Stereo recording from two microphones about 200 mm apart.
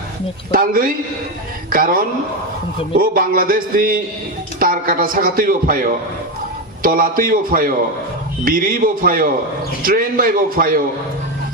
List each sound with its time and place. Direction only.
0.5 s speech: 45° right (ahead or behind)